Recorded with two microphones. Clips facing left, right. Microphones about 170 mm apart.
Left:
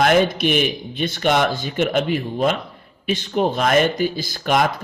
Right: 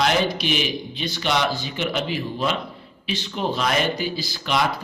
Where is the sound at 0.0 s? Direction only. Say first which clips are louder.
Left 5 dB; 50° left (ahead or behind).